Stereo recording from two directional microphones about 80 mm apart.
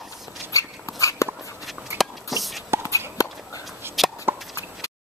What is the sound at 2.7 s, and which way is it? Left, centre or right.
Walk, right.